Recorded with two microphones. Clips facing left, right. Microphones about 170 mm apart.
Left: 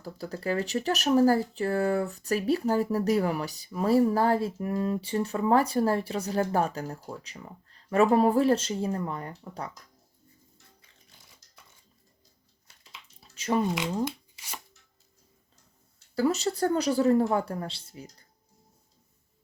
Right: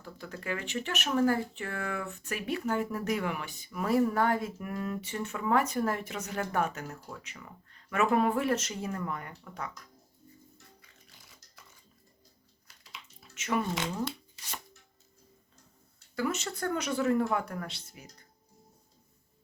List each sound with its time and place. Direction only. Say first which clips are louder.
0.0 s speech: left 7 dB; 35° left (ahead or behind)
12.6 s a sound: right 1 dB; 30° left (ahead or behind)
14.0 s rub: left 4 dB; 10° left (ahead or behind)
16.1 s speech: left 7 dB; 35° left (ahead or behind)